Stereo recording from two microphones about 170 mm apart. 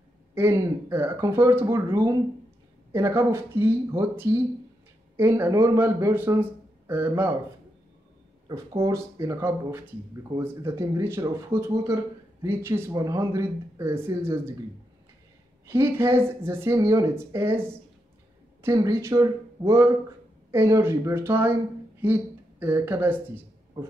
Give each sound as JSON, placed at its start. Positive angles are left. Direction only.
{"t": 0.3, "sound": "speech", "side_deg": -15}
{"t": 8.5, "sound": "speech", "side_deg": -20}
{"t": 15.6, "sound": "a woman's voice", "side_deg": -15}